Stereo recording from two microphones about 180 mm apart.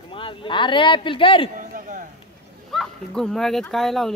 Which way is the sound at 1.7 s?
45° right (ahead or behind).